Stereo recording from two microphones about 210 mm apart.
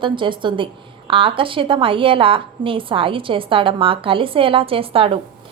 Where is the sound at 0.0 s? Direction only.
25° right (ahead or behind).